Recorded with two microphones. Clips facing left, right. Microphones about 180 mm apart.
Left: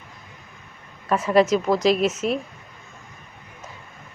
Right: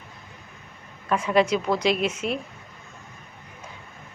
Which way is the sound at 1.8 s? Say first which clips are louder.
Left 4 dB; 45° left (ahead or behind).